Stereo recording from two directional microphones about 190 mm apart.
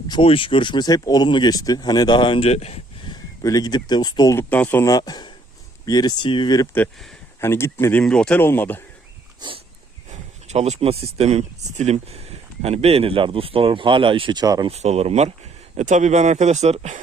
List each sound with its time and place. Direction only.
0.1 s speech: 25° left (ahead or behind)
3.4 s speech: 20° left (ahead or behind)
6.7 s speech: centre (ahead or behind)
7.4 s speech: 15° left (ahead or behind)
10.1 s speech: 35° right (ahead or behind); by 14.7 s 20° right (ahead or behind)
14.7 s speech: 35° right (ahead or behind)